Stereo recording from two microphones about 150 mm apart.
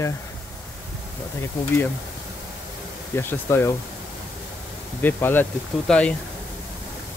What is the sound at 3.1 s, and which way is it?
Speech, 15° left (ahead or behind).